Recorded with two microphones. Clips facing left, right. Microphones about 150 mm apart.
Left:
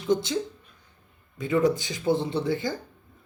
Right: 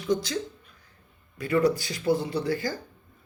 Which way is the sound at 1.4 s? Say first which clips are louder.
Even; 20° left (ahead or behind).